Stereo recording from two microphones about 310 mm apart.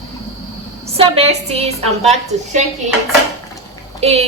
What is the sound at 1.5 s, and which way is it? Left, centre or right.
Speech, centre.